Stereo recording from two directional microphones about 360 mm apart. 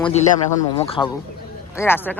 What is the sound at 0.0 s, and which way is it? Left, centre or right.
Speech, centre.